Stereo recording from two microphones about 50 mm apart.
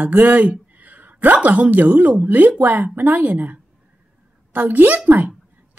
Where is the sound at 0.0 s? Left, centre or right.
Right.